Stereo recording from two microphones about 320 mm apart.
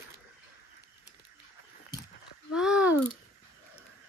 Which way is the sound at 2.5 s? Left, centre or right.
Centre.